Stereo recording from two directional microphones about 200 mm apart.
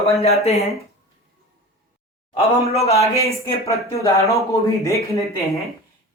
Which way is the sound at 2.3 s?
30° left (ahead or behind).